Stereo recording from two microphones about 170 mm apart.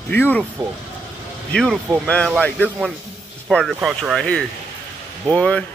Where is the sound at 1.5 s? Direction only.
5° left (ahead or behind).